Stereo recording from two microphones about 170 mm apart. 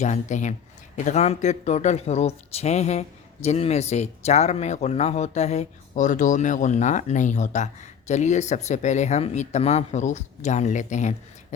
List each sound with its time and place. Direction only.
0.0 s speech: 45° left (ahead or behind)